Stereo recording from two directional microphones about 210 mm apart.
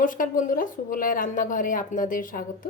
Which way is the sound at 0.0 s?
40° left (ahead or behind).